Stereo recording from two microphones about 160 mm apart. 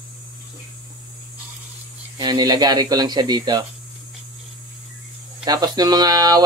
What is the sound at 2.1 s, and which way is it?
Speech, 25° right (ahead or behind).